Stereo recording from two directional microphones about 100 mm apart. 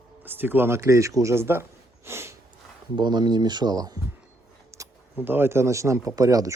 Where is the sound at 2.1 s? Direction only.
25° right (ahead or behind).